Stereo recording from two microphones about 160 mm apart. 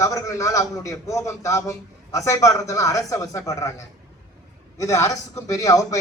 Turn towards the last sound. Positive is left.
turn(degrees=20)  # may be behind; listen again after turning